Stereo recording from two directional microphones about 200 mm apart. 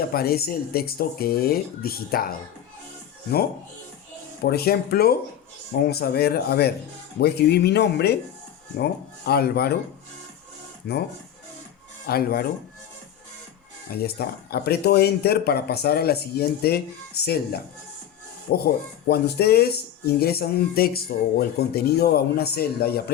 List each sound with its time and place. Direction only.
0.1 s speech: 50° left (ahead or behind)
4.4 s speech: 55° left (ahead or behind)
10.8 s speech: 55° left (ahead or behind)
12.0 s speech: 50° left (ahead or behind)
13.9 s speech: 50° left (ahead or behind)
18.5 s speech: 50° left (ahead or behind)